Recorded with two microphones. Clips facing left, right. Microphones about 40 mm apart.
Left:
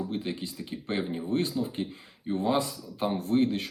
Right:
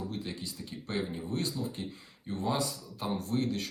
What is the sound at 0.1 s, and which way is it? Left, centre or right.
Speech, left.